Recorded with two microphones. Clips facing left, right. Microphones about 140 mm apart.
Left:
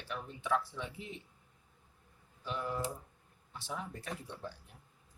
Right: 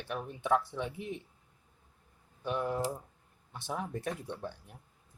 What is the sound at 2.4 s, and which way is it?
A man's voice, 55° right (ahead or behind).